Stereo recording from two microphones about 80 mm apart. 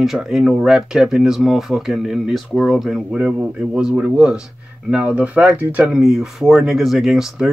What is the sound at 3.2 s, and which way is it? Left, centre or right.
Speech, right.